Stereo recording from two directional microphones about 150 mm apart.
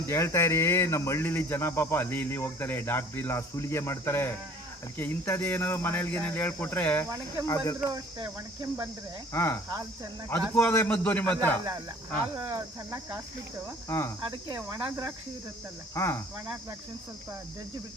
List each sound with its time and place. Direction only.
0.1 s speech: 20° left (ahead or behind)
7.9 s speech: 25° right (ahead or behind)
9.3 s speech: 15° left (ahead or behind)
12.4 s cricket: 20° right (ahead or behind)
13.8 s cricket: 20° left (ahead or behind)
14.3 s speech: 25° right (ahead or behind)